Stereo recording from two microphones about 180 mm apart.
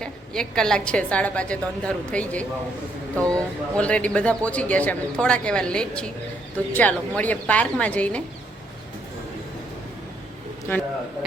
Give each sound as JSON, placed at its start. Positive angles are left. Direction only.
{"t": 0.0, "sound": "a woman's voice", "side_deg": 5}
{"t": 10.7, "sound": "a woman's voice", "side_deg": 10}